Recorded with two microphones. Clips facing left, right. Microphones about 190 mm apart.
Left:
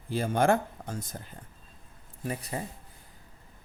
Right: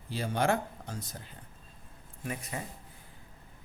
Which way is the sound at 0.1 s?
50° left (ahead or behind).